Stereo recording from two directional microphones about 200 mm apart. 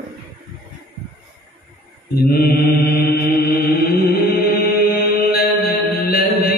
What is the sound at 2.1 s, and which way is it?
Mantra, 50° left (ahead or behind).